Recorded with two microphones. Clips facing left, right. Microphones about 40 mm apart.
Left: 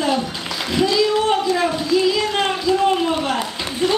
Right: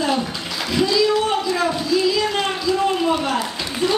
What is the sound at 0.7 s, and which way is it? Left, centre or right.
Speech, left.